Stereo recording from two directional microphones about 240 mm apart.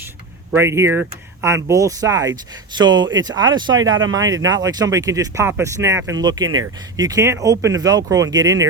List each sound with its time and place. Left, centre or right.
0.5 s speech: centre
6.4 s speech: right
6.9 s speech: centre